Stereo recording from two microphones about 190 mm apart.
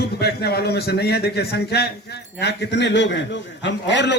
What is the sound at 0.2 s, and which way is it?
A man's voice, 55° left (ahead or behind).